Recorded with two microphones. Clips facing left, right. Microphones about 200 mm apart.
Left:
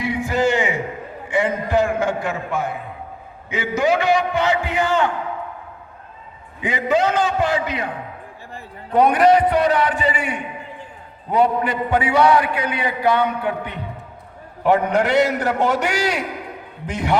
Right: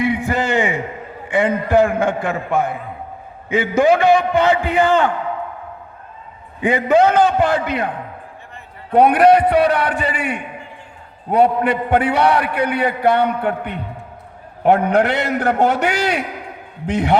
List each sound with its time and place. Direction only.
0.0 s a sound: 55° right (ahead or behind)
1.3 s a man's voice: 55° right (ahead or behind)
6.6 s a man's voice: 55° right (ahead or behind)